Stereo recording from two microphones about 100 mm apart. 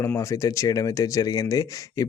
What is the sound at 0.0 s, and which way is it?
Speech, 30° left (ahead or behind).